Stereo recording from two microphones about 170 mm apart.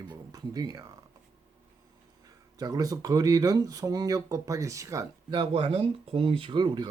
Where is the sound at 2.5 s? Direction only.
20° right (ahead or behind).